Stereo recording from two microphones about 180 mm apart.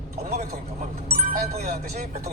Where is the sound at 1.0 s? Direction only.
55° right (ahead or behind).